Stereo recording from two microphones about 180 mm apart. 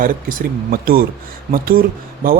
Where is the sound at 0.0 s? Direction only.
50° right (ahead or behind).